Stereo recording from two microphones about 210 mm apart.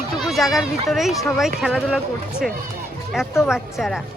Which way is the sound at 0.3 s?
Centre (ahead or behind).